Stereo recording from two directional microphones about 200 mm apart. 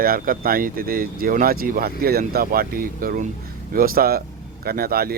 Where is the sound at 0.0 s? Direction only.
45° right (ahead or behind).